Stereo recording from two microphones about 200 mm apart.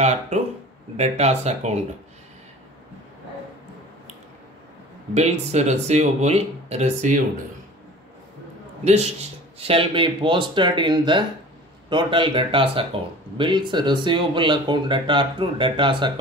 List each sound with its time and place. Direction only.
0.0 s speech: 35° right (ahead or behind)
5.1 s speech: 35° right (ahead or behind)
8.8 s speech: 30° right (ahead or behind)